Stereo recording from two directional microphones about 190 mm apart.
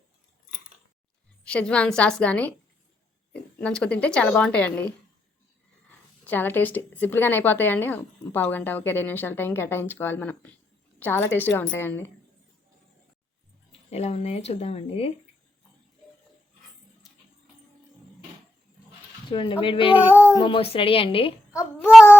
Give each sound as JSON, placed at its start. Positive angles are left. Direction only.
{"t": 1.5, "sound": "a woman's voice", "side_deg": 5}
{"t": 6.2, "sound": "a woman's voice", "side_deg": 10}
{"t": 13.9, "sound": "speech", "side_deg": 35}
{"t": 19.3, "sound": "a woman's voice", "side_deg": 30}
{"t": 20.0, "sound": "child singing", "side_deg": -10}
{"t": 20.3, "sound": "a woman's voice", "side_deg": 25}
{"t": 21.9, "sound": "cat", "side_deg": -5}